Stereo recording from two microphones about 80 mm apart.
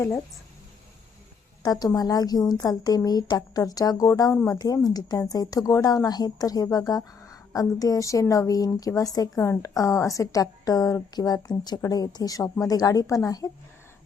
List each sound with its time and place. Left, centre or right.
1.6 s speech: left